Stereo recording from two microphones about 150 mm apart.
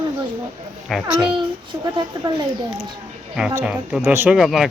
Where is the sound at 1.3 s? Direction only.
30° right (ahead or behind).